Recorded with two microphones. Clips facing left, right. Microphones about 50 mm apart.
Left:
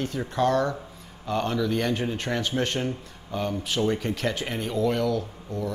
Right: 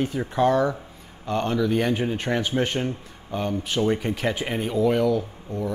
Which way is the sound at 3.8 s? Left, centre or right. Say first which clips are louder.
Right 2 dB; centre.